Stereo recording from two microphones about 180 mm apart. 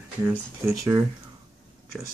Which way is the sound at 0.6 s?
15° right (ahead or behind).